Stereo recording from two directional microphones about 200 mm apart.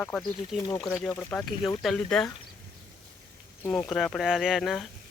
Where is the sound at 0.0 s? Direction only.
5° left (ahead or behind).